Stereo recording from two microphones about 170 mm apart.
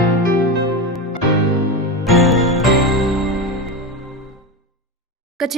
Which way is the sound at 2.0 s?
Centre (ahead or behind).